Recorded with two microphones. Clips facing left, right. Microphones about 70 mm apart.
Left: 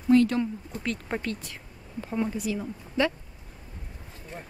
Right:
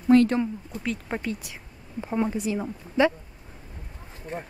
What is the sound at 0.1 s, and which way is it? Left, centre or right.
Speech, right.